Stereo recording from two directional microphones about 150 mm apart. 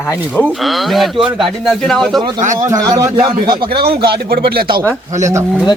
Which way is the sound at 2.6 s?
25° right (ahead or behind).